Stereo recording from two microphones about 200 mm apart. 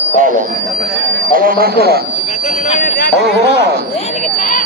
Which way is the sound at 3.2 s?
60° right (ahead or behind).